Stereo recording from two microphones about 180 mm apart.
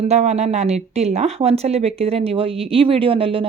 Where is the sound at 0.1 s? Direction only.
35° right (ahead or behind).